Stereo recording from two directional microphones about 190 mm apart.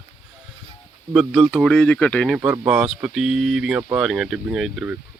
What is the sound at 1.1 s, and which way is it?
Speech, centre (ahead or behind).